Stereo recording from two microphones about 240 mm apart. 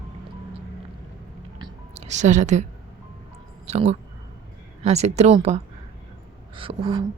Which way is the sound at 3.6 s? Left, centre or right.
Right.